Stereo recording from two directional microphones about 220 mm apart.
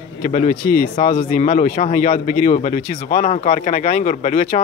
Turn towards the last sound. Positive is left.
turn(degrees=35)  # may be behind; listen again after turning